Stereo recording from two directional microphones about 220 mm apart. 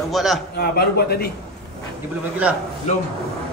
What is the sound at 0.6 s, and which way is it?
Speech, 45° left (ahead or behind).